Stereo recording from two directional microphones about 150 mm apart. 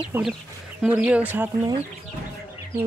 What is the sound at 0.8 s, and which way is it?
Speech, 10° right (ahead or behind).